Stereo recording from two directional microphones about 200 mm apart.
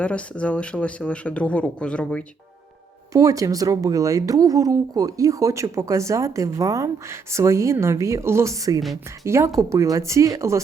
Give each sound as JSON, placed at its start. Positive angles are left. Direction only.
{"t": 0.0, "sound": "speech", "side_deg": 5}
{"t": 3.1, "sound": "speech", "side_deg": -15}